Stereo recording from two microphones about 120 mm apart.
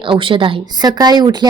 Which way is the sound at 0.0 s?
45° right (ahead or behind).